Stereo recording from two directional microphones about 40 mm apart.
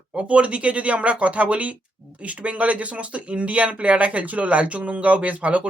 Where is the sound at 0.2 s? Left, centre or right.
Right.